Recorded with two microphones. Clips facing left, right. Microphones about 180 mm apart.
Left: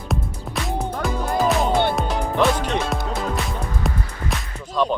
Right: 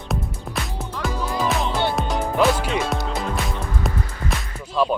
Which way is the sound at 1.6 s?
55° left (ahead or behind).